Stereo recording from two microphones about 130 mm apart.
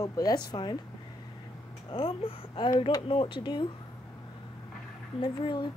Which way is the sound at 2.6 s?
40° left (ahead or behind).